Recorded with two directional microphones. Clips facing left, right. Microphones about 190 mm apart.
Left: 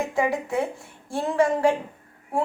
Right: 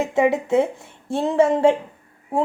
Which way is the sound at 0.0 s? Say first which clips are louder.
Right 5 dB; 25° right (ahead or behind).